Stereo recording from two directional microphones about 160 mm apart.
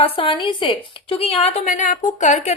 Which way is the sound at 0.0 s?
35° left (ahead or behind).